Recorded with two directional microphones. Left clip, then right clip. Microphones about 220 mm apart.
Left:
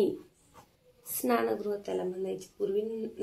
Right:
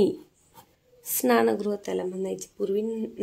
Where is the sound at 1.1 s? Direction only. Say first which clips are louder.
Right 7 dB; 50° right (ahead or behind).